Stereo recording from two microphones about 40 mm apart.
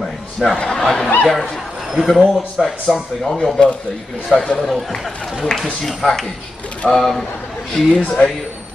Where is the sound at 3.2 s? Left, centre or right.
Centre.